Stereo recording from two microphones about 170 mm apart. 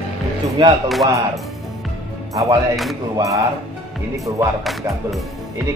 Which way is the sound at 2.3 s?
20° right (ahead or behind).